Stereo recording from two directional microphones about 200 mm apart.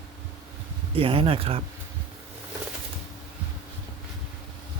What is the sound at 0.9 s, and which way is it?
Speech, 25° right (ahead or behind).